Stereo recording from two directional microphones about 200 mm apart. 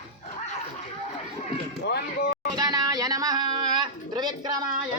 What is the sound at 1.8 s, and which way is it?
Speech, 50° left (ahead or behind).